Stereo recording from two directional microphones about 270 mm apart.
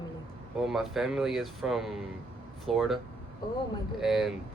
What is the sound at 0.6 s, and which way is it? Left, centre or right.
Speech, centre.